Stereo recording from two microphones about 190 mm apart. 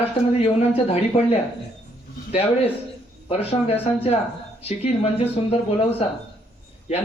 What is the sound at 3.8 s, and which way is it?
Speech, 30° left (ahead or behind).